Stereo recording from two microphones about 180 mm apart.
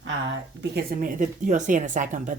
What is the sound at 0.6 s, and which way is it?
Speech, 50° right (ahead or behind).